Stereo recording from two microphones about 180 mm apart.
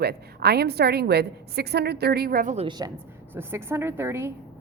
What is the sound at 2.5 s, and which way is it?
Speech, 25° right (ahead or behind).